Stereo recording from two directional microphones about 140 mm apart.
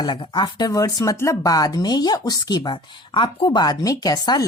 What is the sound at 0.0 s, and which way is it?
Speech, 35° left (ahead or behind).